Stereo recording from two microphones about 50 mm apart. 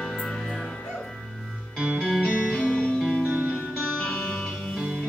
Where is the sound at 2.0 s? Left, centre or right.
Centre.